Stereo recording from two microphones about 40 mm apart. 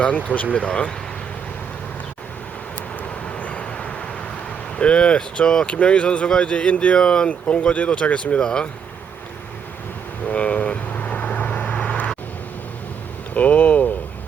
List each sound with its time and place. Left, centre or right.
0.3 s speech: left
3.2 s vehicle: left
4.8 s speech: left
10.2 s vehicle: left
13.3 s speech: left